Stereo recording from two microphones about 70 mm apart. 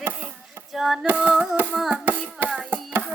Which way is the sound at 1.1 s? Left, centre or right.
Right.